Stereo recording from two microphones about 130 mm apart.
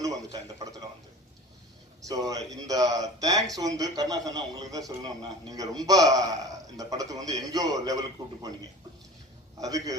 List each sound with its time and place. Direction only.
0.0 s a sound: 25° right (ahead or behind)
2.0 s a man's voice: 30° right (ahead or behind)
9.6 s a man's voice: 25° right (ahead or behind)